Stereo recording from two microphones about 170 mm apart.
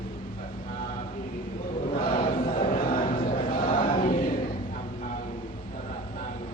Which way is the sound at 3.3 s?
55° left (ahead or behind).